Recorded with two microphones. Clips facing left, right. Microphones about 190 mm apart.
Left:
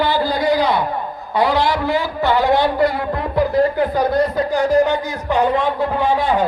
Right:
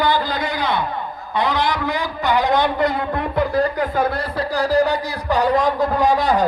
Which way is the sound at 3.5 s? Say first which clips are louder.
Left 4 dB; 25° left (ahead or behind).